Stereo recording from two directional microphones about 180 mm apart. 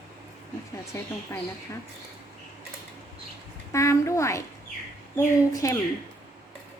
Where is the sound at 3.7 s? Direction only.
15° left (ahead or behind).